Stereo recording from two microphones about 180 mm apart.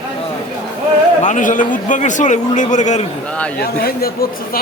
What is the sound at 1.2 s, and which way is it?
A man's voice, 45° left (ahead or behind).